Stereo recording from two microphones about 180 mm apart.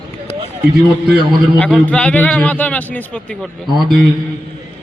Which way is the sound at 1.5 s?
5° left (ahead or behind).